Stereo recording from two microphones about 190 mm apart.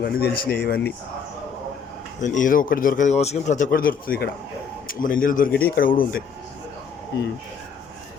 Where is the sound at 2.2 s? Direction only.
40° left (ahead or behind).